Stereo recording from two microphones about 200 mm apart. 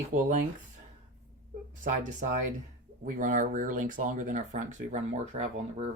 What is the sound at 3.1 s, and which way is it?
Speech, 40° right (ahead or behind).